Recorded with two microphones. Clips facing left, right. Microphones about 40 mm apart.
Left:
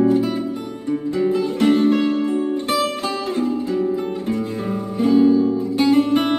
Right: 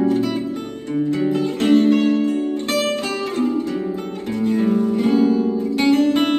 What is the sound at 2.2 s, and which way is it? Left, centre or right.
Music, left.